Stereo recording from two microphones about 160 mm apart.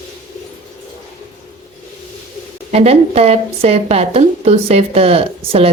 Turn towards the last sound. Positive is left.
turn(degrees=-40)  # may be behind; listen again after turning